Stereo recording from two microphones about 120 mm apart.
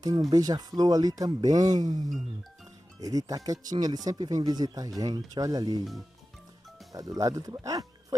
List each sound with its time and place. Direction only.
0.3 s speech: 35° right (ahead or behind)
6.9 s speech: 30° right (ahead or behind)